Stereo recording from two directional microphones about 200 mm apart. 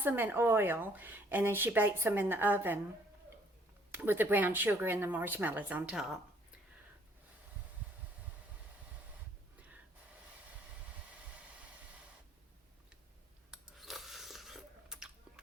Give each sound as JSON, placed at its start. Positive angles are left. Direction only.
{"t": 0.0, "sound": "speech", "side_deg": -10}
{"t": 3.9, "sound": "speech", "side_deg": -10}
{"t": 11.1, "sound": "vehicle", "side_deg": -5}
{"t": 13.5, "sound": "chewing", "side_deg": 0}